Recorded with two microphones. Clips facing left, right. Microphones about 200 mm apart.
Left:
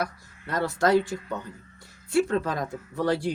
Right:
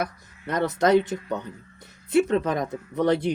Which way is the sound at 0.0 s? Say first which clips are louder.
Right 2 dB; 20° right (ahead or behind).